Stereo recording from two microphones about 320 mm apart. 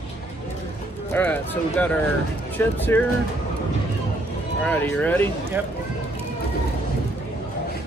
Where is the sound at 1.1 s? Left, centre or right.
Centre.